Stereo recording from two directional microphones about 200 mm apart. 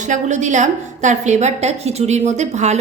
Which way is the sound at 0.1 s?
35° right (ahead or behind).